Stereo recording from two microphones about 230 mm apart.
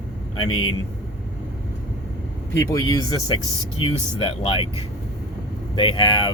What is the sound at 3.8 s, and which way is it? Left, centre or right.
Vehicle, left.